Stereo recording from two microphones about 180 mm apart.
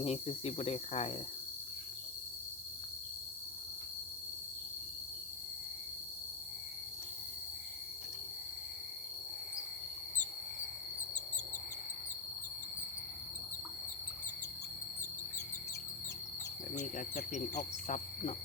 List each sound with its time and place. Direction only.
0.0 s speech: 35° left (ahead or behind)
16.7 s speech: 45° left (ahead or behind)